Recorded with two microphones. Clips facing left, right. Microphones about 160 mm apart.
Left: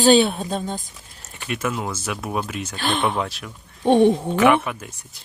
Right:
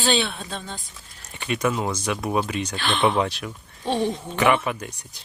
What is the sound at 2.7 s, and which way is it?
Speech, 45° left (ahead or behind).